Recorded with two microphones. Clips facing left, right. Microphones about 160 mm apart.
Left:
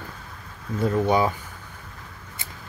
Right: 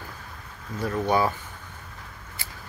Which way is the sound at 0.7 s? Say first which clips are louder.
Left 3 dB; 25° left (ahead or behind).